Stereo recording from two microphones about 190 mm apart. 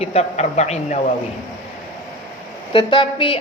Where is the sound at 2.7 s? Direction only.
25° left (ahead or behind).